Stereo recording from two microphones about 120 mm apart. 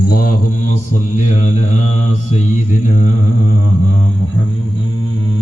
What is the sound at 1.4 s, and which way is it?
Mantra, 90° left.